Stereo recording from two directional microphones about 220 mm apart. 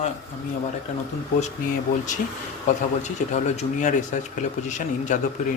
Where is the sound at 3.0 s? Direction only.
30° left (ahead or behind).